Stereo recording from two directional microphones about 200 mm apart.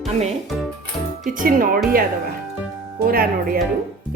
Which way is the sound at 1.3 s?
45° right (ahead or behind).